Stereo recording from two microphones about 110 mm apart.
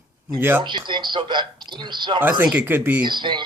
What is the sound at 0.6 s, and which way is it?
Speech, 45° right (ahead or behind).